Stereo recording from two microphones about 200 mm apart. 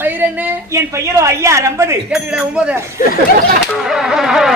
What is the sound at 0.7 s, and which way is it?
A woman's voice, 15° right (ahead or behind).